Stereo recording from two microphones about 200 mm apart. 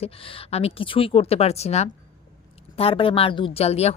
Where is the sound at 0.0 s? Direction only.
25° left (ahead or behind).